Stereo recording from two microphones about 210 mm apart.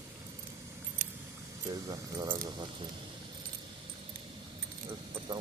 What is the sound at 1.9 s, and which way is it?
Speech, 20° right (ahead or behind).